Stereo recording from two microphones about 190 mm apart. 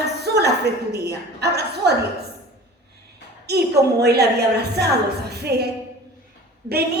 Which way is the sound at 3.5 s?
60° right (ahead or behind).